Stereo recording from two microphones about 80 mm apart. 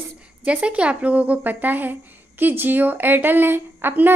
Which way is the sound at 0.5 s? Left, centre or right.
Centre.